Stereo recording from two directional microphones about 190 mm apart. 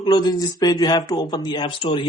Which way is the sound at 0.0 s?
20° left (ahead or behind).